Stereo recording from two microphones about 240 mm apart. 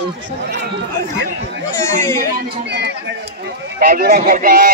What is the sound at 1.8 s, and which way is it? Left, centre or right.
Speech, centre.